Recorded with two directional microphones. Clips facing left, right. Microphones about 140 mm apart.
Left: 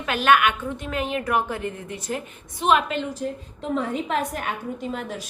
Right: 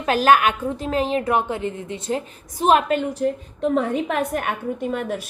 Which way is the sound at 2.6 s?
40° right (ahead or behind).